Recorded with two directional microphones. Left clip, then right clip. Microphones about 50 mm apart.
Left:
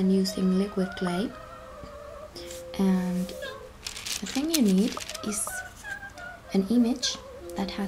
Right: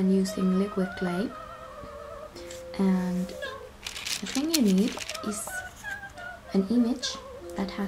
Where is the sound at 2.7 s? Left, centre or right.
Left.